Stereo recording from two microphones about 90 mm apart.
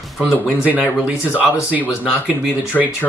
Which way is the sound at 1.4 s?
15° right (ahead or behind).